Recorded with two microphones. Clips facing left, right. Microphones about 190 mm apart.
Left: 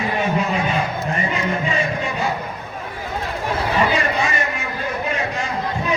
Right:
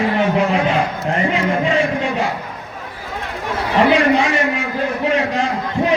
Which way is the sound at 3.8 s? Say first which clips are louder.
Right 9 dB; 80° right.